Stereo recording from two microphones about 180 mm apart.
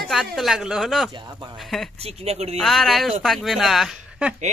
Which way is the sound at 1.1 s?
25° right (ahead or behind).